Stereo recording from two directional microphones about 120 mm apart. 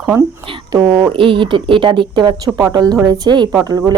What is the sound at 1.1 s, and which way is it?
Speech, 45° right (ahead or behind).